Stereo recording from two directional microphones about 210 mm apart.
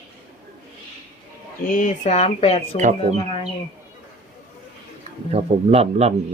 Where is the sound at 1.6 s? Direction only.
40° left (ahead or behind).